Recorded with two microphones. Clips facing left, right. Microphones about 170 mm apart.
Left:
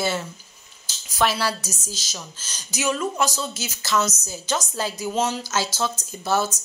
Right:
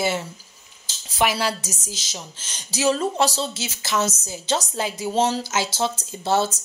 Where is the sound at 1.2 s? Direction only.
15° right (ahead or behind).